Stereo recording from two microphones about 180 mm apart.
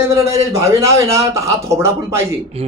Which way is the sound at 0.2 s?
15° right (ahead or behind).